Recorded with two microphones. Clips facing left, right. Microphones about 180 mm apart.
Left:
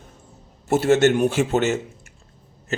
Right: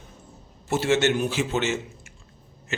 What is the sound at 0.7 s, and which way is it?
A man's voice, 45° left (ahead or behind).